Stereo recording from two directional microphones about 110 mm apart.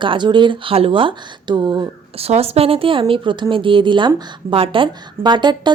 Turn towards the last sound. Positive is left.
turn(degrees=-40)  # may be behind; listen again after turning